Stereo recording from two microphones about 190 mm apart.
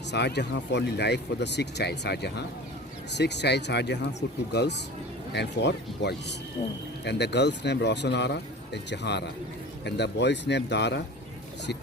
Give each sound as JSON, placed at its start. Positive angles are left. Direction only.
{"t": 0.1, "sound": "speech", "side_deg": 65}